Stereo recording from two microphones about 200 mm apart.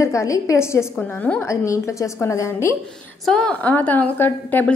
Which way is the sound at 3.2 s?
5° left (ahead or behind).